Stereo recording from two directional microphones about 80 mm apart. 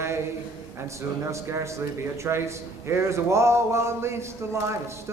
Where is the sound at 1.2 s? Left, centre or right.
Right.